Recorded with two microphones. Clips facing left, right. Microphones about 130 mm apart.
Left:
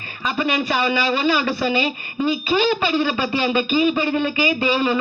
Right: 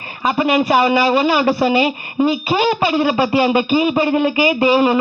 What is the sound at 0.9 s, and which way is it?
Speech, 35° right (ahead or behind).